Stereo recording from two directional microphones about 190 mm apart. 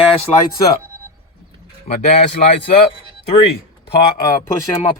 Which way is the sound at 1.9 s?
35° left (ahead or behind).